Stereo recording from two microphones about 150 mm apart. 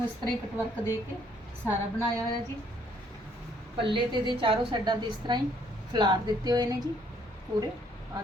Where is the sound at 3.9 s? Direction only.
35° right (ahead or behind).